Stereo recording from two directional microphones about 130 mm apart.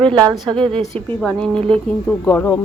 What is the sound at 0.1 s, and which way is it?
Speech, 35° right (ahead or behind).